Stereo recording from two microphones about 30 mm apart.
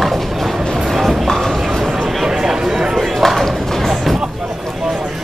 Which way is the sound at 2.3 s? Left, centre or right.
Right.